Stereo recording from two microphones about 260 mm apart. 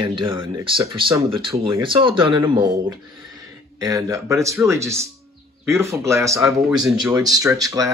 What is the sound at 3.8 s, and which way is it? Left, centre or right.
Speech, centre.